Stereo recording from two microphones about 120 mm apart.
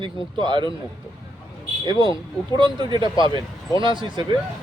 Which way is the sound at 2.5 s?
40° right (ahead or behind).